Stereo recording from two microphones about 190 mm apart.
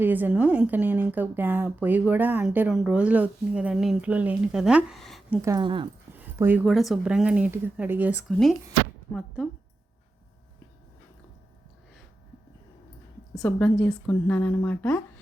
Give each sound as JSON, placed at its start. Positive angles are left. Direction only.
{"t": 0.0, "sound": "a woman's voice", "side_deg": -10}
{"t": 5.4, "sound": "speech", "side_deg": -20}
{"t": 6.1, "sound": "a sound", "side_deg": -10}
{"t": 6.7, "sound": "speech", "side_deg": 0}
{"t": 8.3, "sound": "speech", "side_deg": 0}
{"t": 13.3, "sound": "a woman's voice", "side_deg": 5}